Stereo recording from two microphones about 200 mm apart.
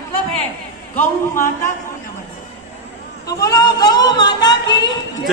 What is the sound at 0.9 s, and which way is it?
Speech, 10° left (ahead or behind).